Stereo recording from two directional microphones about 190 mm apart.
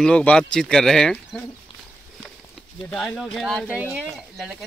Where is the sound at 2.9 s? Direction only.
Centre (ahead or behind).